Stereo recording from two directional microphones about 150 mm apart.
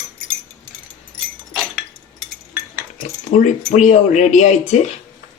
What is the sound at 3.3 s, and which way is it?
Speech, 50° left (ahead or behind).